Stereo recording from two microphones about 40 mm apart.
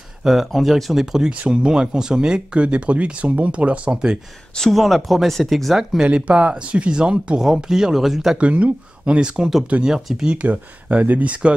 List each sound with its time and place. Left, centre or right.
0.2 s speech: centre
0.5 s speech: centre; by 4.0 s right
4.6 s speech: centre
6.2 s speech: right; by 8.4 s centre
8.4 s speech: right
9.2 s speech: centre
9.7 s speech: right
10.1 s speech: right
10.5 s speech: right